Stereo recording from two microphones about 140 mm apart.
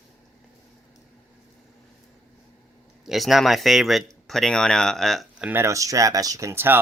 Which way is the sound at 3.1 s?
Centre (ahead or behind).